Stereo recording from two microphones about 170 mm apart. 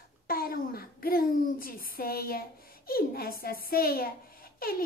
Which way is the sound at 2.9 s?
60° left (ahead or behind).